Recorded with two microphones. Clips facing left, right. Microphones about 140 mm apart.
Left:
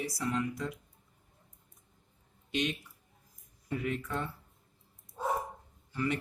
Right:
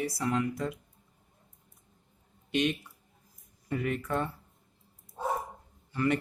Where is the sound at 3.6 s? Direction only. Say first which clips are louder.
Right 3 dB; 55° right (ahead or behind).